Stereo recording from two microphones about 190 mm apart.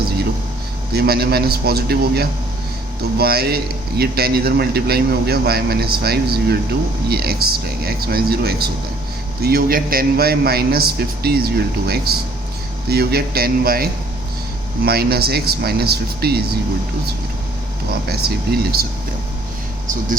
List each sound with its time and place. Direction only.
0.9 s a man's voice: 55° right (ahead or behind)
18.1 s a man's voice: 55° right (ahead or behind)